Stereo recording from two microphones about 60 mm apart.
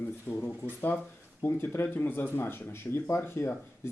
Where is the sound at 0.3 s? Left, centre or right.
Left.